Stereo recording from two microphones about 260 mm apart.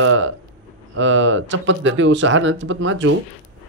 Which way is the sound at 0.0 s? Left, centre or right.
Right.